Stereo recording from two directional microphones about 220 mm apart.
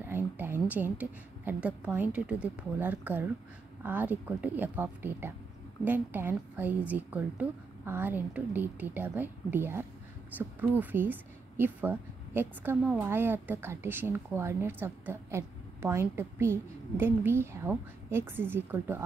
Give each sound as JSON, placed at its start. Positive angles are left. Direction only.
{"t": 0.0, "sound": "a woman's voice", "side_deg": -10}